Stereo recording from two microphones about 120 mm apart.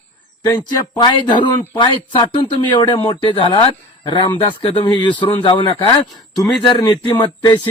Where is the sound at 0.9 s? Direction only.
40° left (ahead or behind).